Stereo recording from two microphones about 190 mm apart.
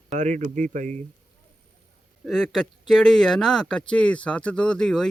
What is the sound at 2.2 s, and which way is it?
Speech, centre (ahead or behind).